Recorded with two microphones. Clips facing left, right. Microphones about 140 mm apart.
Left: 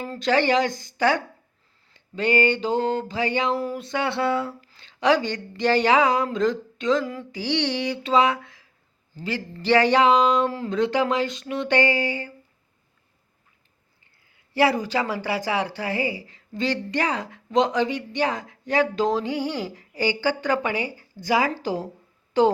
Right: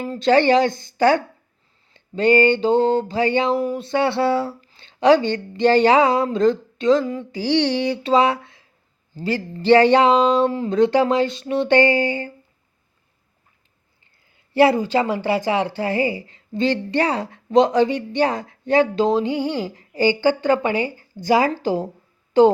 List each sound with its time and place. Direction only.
0.2 s speech: 30° right (ahead or behind)
3.5 s speech: 15° right (ahead or behind)
3.8 s speech: 30° right (ahead or behind)
14.5 s speech: 25° right (ahead or behind)
22.3 s a sound: 30° right (ahead or behind)